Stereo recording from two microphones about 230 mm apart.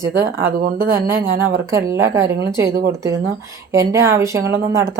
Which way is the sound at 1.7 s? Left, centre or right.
Centre.